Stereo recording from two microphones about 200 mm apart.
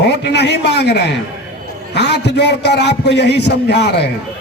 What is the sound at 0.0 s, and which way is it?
A man's voice, 55° left (ahead or behind).